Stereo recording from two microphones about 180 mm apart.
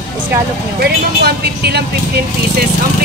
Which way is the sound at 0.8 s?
60° right (ahead or behind).